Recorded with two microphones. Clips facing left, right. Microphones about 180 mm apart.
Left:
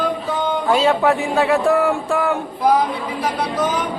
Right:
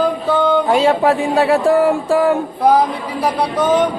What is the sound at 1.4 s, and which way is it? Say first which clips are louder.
Music: right 3 dB; 30° right (ahead or behind).